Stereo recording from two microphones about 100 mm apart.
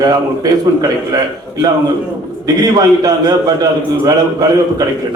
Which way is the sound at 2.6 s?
40° right (ahead or behind).